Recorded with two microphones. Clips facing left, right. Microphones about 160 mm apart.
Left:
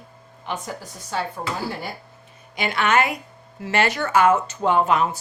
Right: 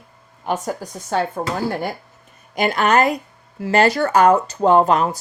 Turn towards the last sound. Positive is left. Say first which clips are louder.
# right 5 dB
turn(degrees=-40)  # may be behind; listen again after turning